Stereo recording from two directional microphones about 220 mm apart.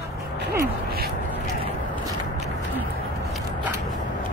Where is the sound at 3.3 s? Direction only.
5° right (ahead or behind).